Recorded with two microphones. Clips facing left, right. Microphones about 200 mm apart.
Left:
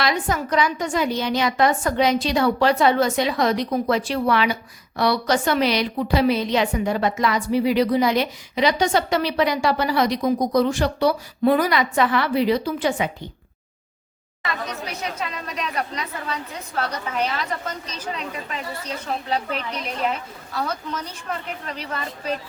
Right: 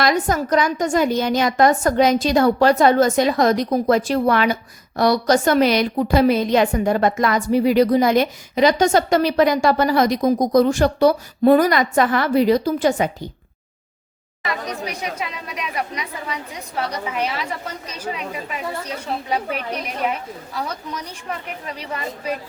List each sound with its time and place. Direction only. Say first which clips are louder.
0.0 s a woman's voice: right 4 dB; 45° right (ahead or behind)
15.0 s a woman's voice: right 1 dB; 10° right (ahead or behind)